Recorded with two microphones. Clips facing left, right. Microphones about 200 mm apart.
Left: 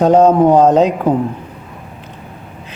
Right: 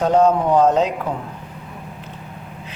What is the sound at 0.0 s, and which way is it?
A man's voice, 45° left (ahead or behind).